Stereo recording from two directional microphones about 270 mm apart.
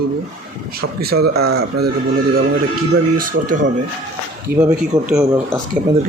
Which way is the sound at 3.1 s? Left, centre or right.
Right.